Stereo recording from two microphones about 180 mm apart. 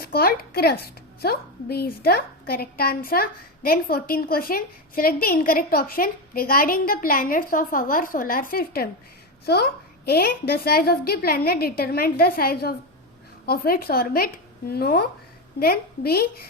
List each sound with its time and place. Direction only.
0.0 s a woman's voice: 60° left (ahead or behind)
10.1 s a woman's voice: 60° left (ahead or behind)